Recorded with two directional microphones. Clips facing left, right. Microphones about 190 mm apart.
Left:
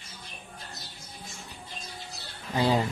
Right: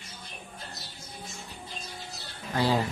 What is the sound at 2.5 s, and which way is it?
Speech, 20° left (ahead or behind).